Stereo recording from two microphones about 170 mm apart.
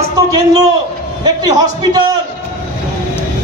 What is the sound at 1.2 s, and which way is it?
Speech, 25° right (ahead or behind).